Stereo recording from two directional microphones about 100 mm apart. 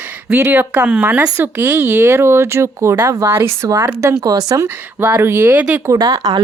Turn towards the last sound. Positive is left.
turn(degrees=-40)  # may be behind; listen again after turning